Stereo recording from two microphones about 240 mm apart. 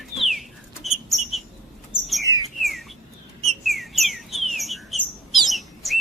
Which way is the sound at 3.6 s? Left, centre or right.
Centre.